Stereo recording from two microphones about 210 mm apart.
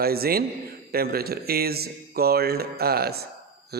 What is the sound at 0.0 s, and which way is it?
Speech, 45° right (ahead or behind).